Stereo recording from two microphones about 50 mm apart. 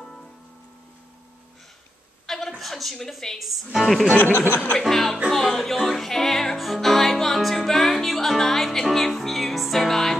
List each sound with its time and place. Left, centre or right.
0.0 s music: centre
2.2 s a sound: centre
2.6 s a woman's voice: centre
4.1 s speech: left
4.7 s a woman's voice: centre
5.3 s music: centre